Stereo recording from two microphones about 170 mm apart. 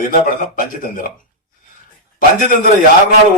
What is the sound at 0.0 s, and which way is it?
A man's voice, 55° left (ahead or behind).